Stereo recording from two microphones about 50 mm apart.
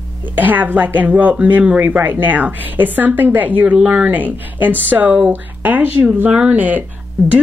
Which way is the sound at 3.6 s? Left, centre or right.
Right.